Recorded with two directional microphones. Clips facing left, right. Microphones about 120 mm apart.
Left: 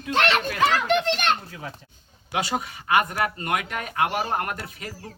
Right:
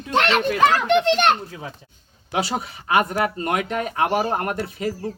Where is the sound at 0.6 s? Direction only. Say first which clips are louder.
Right 4 dB; 55° right (ahead or behind).